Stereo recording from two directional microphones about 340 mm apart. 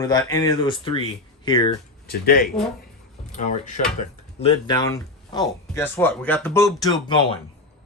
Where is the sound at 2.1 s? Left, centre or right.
Left.